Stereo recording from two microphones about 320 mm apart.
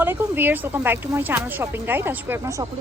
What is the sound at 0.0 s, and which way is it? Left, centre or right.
Speech, centre.